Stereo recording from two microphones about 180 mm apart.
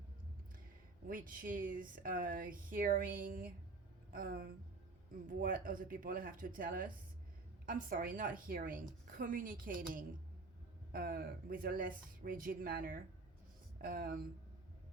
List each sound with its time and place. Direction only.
1.0 s a woman's voice: 50° right (ahead or behind)